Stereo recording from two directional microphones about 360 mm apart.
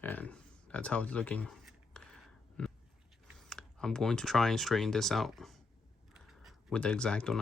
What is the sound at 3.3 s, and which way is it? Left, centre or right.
Speech, centre.